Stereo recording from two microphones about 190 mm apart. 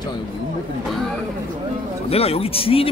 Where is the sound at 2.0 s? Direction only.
30° left (ahead or behind).